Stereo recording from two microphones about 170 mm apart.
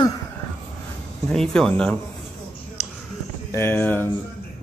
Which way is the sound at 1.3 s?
5° left (ahead or behind).